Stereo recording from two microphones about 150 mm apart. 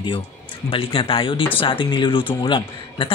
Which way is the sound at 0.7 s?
35° left (ahead or behind).